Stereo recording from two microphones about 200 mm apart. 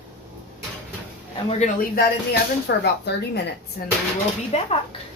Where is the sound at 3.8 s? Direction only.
45° left (ahead or behind).